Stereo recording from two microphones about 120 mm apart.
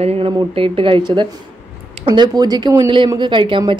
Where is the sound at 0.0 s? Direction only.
60° right (ahead or behind).